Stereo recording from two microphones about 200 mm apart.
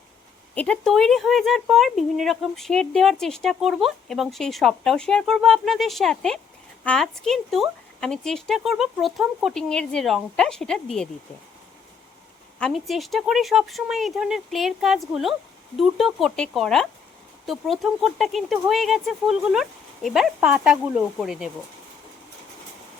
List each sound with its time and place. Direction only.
0.5 s speech: 5° left (ahead or behind)
12.5 s speech: centre (ahead or behind)